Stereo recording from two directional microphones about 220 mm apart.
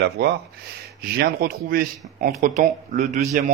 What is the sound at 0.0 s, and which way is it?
Speech, 50° right (ahead or behind).